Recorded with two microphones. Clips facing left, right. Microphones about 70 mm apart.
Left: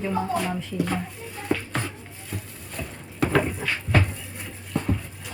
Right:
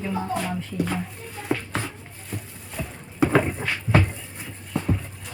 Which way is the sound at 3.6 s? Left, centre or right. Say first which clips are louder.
Even; right.